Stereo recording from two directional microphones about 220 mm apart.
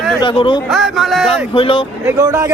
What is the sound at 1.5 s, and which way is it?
Speech, 25° left (ahead or behind).